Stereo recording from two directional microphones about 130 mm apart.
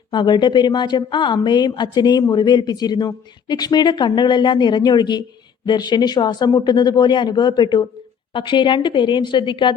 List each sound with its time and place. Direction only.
0.1 s a woman's voice: 35° left (ahead or behind)